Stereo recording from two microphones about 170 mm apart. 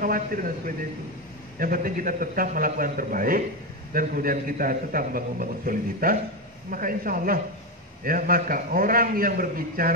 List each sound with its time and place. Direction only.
0.0 s a man's voice: 55° right (ahead or behind)